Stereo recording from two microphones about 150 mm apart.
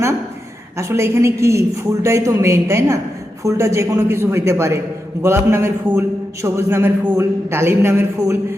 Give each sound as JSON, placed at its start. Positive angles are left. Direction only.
{"t": 0.8, "sound": "a man's voice", "side_deg": -20}